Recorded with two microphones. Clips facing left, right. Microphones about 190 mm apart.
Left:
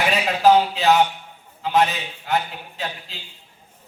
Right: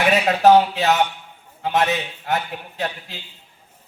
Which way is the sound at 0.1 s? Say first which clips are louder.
Right 3 dB; 60° right (ahead or behind).